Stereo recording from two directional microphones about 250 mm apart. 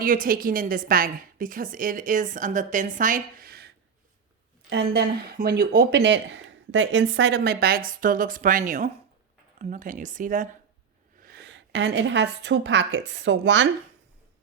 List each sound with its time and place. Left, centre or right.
0.0 s speech: right
4.7 s a woman's voice: right